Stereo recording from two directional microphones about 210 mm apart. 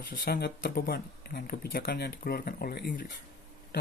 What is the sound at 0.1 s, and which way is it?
Speech, 50° left (ahead or behind).